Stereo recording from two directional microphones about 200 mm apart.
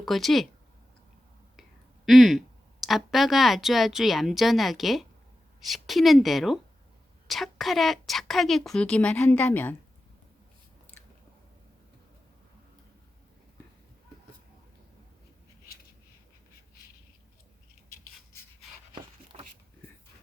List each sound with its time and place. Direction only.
0.0 s a woman's voice: centre (ahead or behind)
2.0 s a woman's voice: centre (ahead or behind)
18.9 s a sound: 25° right (ahead or behind)